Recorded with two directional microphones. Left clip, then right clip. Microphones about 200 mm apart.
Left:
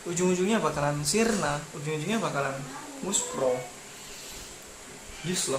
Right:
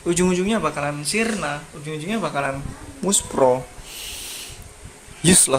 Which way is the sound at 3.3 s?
55° right (ahead or behind).